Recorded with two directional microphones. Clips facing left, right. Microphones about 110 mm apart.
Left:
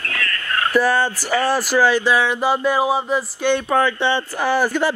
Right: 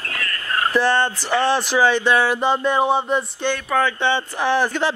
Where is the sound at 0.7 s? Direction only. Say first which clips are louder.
Left 2 dB; 5° left (ahead or behind).